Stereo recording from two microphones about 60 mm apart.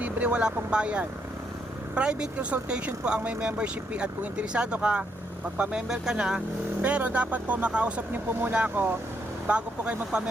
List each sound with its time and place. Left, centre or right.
0.0 s speech: right
6.8 s speech: right